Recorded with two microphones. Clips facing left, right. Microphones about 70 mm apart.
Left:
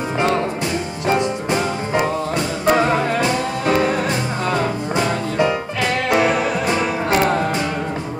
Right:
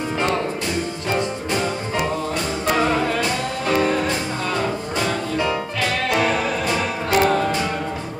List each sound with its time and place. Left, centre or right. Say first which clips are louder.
1.0 s music: left 7 dB; left